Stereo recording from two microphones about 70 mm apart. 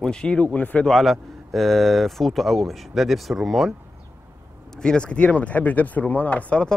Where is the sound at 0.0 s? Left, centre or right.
Centre.